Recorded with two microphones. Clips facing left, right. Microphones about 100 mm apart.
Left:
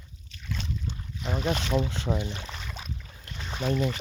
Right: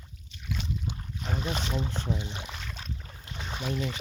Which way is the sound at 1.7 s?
90° left.